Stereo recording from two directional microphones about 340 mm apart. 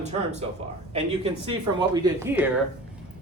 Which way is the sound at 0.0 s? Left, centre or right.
Centre.